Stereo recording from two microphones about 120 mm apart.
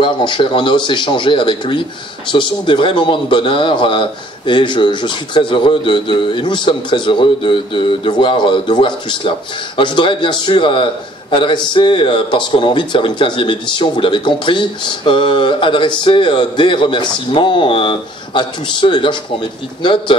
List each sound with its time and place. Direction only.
0.0 s a man's voice: 40° left (ahead or behind)